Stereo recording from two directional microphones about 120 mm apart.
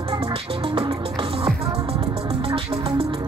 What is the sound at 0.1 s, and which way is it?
Music, 50° right (ahead or behind).